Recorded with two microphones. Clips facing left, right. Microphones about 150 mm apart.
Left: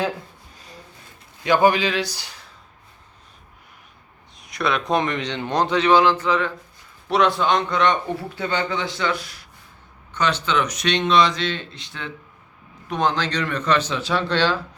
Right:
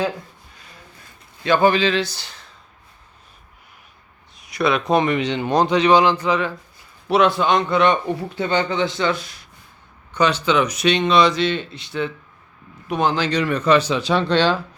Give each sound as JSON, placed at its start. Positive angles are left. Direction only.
{"t": 1.5, "sound": "speech", "side_deg": 15}
{"t": 4.4, "sound": "speech", "side_deg": -5}
{"t": 8.4, "sound": "speech", "side_deg": -20}
{"t": 10.1, "sound": "speech", "side_deg": -10}